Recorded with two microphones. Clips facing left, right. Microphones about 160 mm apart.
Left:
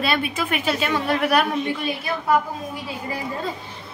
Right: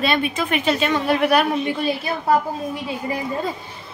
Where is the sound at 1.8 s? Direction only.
35° right (ahead or behind).